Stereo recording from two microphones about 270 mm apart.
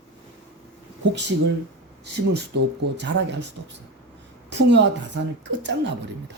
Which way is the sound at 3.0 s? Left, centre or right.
Right.